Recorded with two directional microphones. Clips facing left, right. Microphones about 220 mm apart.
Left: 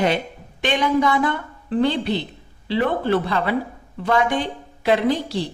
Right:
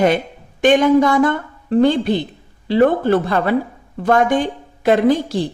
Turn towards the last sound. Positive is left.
turn(degrees=-50)  # may be behind; listen again after turning